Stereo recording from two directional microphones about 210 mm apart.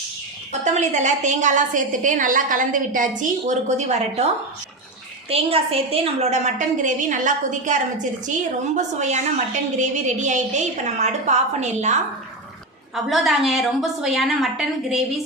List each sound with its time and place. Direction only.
0.6 s a woman's voice: 35° right (ahead or behind)
5.3 s a woman's voice: 25° right (ahead or behind)
13.1 s a woman's voice: centre (ahead or behind)